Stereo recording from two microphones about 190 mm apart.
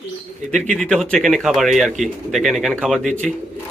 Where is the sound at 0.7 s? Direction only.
5° left (ahead or behind).